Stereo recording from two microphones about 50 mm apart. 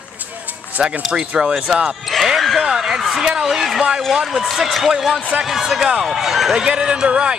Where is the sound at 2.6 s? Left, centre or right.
Centre.